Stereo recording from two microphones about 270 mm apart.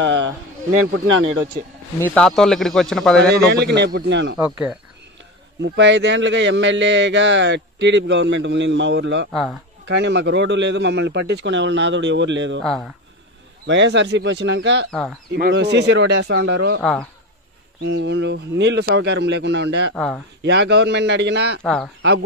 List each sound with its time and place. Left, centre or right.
0.0 s a sound: right
2.1 s speech: centre
3.4 s speech: right
4.5 s speech: centre
5.6 s speech: right
9.3 s speech: centre
9.8 s speech: right
12.6 s speech: centre
13.7 s speech: right
14.9 s speech: centre
15.3 s speech: right
16.8 s speech: centre
17.8 s speech: right
21.6 s speech: centre